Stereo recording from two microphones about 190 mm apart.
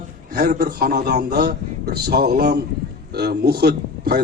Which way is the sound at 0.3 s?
50° right (ahead or behind).